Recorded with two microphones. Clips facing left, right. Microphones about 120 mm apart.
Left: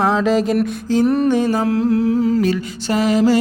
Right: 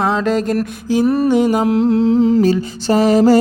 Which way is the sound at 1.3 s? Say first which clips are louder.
Right 3 dB; 15° right (ahead or behind).